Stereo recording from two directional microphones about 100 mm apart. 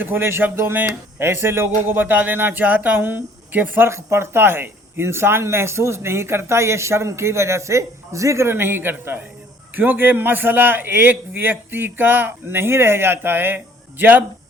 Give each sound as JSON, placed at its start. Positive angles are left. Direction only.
{"t": 0.0, "sound": "speech", "side_deg": -20}